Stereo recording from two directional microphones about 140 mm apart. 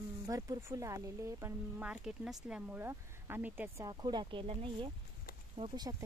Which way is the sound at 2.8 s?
15° right (ahead or behind).